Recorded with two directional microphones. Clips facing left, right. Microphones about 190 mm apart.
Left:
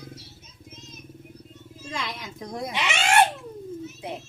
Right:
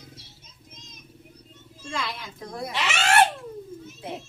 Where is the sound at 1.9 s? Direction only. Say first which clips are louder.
Right 1 dB; 20° left (ahead or behind).